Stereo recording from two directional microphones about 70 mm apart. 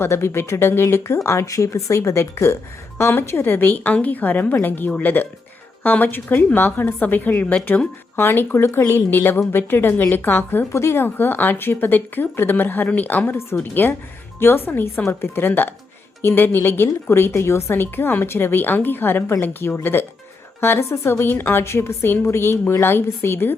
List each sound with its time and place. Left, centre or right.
0.0 s a woman's voice: left
10.7 s a woman's voice: left